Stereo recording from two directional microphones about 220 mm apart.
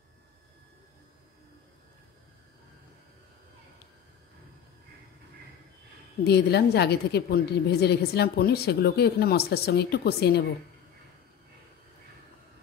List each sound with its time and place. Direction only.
6.2 s a woman's voice: 45° left (ahead or behind)